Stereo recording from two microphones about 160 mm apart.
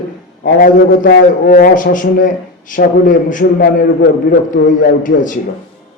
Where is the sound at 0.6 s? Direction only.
75° left (ahead or behind).